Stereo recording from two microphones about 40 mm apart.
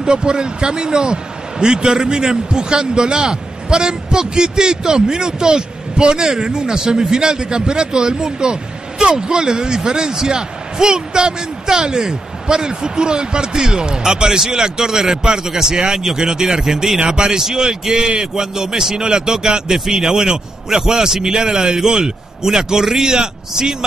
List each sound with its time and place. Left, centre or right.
0.0 s a man's voice: centre